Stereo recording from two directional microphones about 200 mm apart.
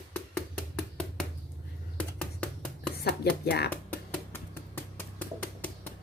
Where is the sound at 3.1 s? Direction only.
55° left (ahead or behind).